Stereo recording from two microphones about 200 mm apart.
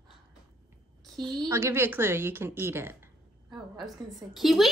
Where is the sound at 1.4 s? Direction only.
15° right (ahead or behind).